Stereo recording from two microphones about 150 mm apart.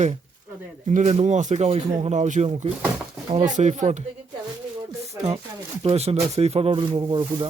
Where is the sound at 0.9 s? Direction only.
55° right (ahead or behind).